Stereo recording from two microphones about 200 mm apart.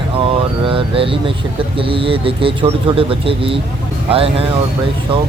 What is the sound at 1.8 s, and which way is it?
Speech, 25° right (ahead or behind).